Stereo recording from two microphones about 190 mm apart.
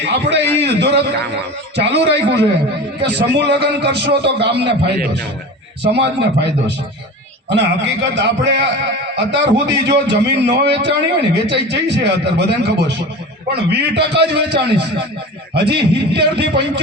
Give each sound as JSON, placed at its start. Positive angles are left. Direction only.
{"t": 0.0, "sound": "a man's voice", "side_deg": -65}
{"t": 0.6, "sound": "a sound", "side_deg": -65}
{"t": 1.7, "sound": "a man's voice", "side_deg": -60}